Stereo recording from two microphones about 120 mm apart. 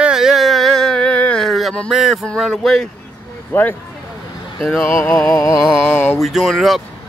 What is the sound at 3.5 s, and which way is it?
Speech, 20° left (ahead or behind).